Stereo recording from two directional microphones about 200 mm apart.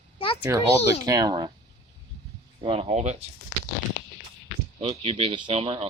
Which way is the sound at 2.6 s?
30° right (ahead or behind).